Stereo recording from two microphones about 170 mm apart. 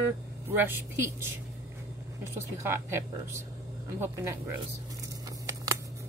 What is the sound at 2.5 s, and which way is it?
A woman's voice, 15° right (ahead or behind).